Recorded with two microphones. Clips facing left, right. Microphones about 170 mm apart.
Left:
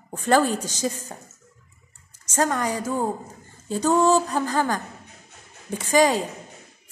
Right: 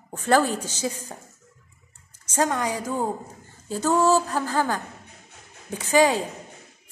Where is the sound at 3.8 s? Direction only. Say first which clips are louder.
Left 1 dB; 15° left (ahead or behind).